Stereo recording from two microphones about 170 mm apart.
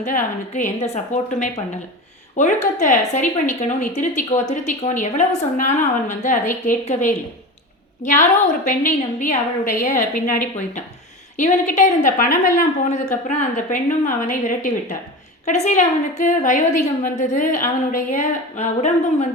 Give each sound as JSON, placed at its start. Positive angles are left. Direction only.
{"t": 0.0, "sound": "a woman's voice", "side_deg": 50}
{"t": 11.3, "sound": "a woman's voice", "side_deg": 45}